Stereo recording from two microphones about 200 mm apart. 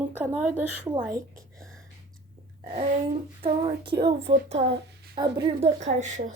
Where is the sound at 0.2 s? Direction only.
10° right (ahead or behind).